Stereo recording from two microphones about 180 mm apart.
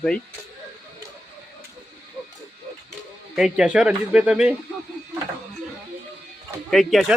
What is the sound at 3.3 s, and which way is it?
Speech, 5° right (ahead or behind).